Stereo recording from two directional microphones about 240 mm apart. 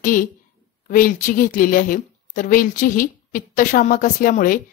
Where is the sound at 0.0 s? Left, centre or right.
Left.